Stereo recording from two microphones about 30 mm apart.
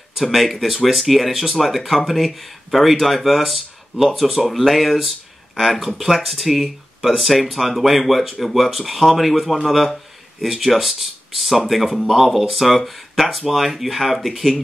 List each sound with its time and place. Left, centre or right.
0.2 s speech: centre